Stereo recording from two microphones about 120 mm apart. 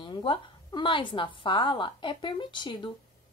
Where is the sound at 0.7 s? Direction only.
40° left (ahead or behind).